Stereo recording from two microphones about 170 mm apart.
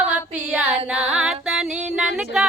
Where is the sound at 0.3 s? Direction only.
10° right (ahead or behind).